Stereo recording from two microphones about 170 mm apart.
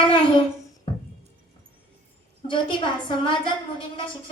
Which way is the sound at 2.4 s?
30° left (ahead or behind).